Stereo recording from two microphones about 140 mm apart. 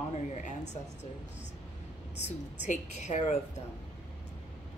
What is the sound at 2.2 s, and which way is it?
A woman's voice, 55° left (ahead or behind).